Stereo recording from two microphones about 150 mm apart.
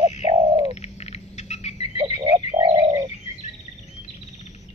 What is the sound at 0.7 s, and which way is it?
Cricket, 45° left (ahead or behind).